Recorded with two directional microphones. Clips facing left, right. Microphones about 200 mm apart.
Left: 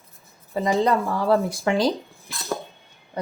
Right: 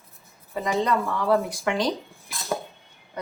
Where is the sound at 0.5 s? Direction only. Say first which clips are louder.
Left 3 dB; 30° left (ahead or behind).